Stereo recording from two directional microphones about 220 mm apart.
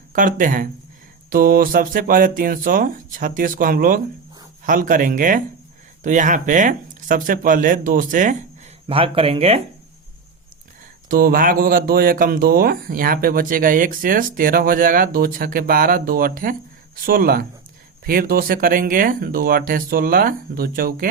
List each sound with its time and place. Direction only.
0.1 s speech: 35° right (ahead or behind)
8.9 s speech: 25° right (ahead or behind)
11.1 s speech: 40° right (ahead or behind)